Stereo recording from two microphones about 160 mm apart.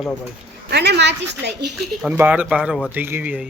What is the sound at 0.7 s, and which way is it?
Speech, 90° right.